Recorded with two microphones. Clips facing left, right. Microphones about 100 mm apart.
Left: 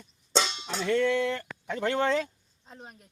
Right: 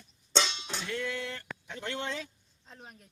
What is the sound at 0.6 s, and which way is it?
Speech, 65° left (ahead or behind).